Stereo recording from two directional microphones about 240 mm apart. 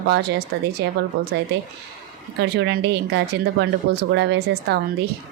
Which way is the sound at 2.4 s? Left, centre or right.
Right.